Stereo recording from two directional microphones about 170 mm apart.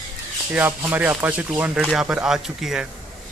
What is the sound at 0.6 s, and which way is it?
Speech, 10° right (ahead or behind).